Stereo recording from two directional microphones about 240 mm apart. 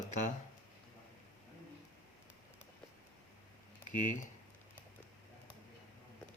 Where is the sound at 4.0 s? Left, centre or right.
Left.